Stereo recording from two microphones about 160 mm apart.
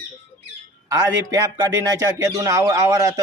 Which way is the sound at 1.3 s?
20° right (ahead or behind).